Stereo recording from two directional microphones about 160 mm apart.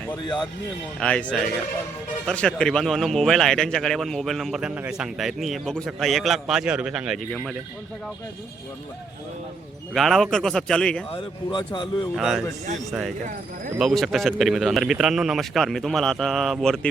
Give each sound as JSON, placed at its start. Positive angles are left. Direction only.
{"t": 0.9, "sound": "speech", "side_deg": 5}
{"t": 7.3, "sound": "speech", "side_deg": 5}
{"t": 9.9, "sound": "speech", "side_deg": 0}
{"t": 11.1, "sound": "speech", "side_deg": 30}
{"t": 12.1, "sound": "speech", "side_deg": 0}